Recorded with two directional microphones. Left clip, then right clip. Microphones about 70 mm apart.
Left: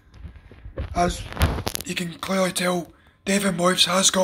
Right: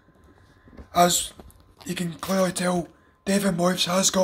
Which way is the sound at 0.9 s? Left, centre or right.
Right.